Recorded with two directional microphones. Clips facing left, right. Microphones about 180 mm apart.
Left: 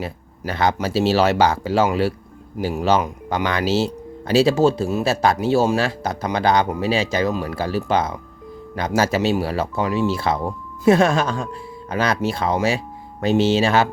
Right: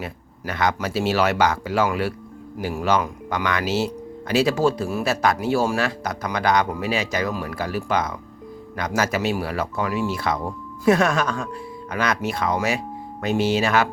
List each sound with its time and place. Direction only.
0.0 s speech: 30° left (ahead or behind)